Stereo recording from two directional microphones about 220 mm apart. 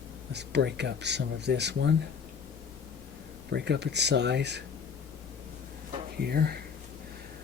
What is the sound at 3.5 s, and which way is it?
Speech, 50° right (ahead or behind).